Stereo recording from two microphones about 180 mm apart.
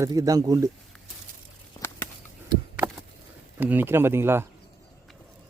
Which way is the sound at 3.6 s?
10° right (ahead or behind).